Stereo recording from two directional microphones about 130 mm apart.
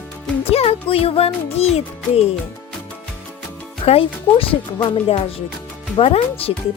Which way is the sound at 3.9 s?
45° left (ahead or behind).